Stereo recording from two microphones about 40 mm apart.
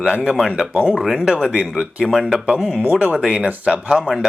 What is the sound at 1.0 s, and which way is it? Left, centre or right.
Speech, centre.